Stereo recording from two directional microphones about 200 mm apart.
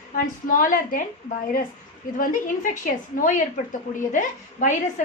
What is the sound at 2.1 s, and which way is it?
A woman's voice, 40° left (ahead or behind).